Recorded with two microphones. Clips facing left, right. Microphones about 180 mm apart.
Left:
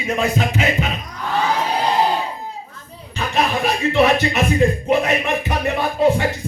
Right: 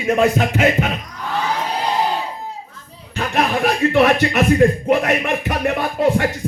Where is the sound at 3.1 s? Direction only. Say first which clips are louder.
Right 1 dB; 55° right (ahead or behind).